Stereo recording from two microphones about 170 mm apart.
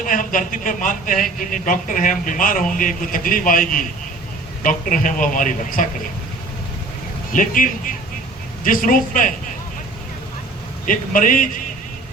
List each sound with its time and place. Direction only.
0.0 s speech: 50° left (ahead or behind)
7.3 s speech: 50° left (ahead or behind)
10.8 s speech: 50° left (ahead or behind)